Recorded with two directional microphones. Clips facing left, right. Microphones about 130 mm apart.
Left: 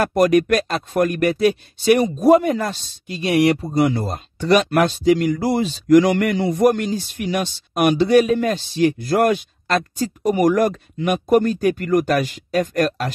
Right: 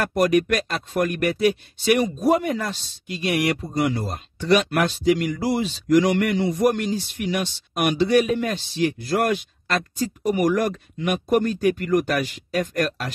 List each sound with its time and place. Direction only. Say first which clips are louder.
0.0 s speech: left 4 dB; 45° left (ahead or behind)